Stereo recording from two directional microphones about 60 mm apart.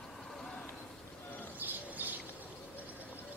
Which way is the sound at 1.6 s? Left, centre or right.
Right.